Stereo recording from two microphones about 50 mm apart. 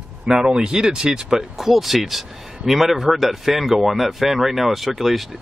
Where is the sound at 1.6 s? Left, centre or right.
Centre.